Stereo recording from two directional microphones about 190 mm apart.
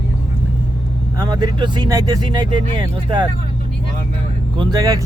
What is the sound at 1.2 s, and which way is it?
Speech, 20° right (ahead or behind).